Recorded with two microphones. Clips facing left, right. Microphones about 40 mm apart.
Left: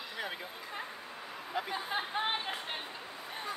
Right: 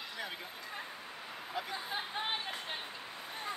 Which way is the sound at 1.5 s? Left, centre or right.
Left.